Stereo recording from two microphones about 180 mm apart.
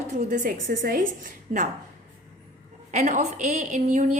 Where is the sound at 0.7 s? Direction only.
75° right (ahead or behind).